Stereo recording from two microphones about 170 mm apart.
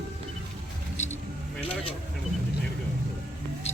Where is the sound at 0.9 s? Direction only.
45° left (ahead or behind).